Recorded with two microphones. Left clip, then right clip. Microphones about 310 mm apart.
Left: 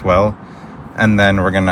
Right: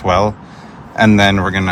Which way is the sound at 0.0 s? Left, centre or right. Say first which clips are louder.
Even; centre.